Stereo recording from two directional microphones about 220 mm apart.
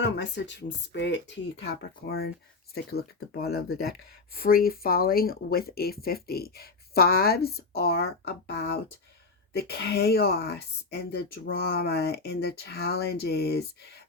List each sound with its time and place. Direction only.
0.0 s speech: 55° left (ahead or behind)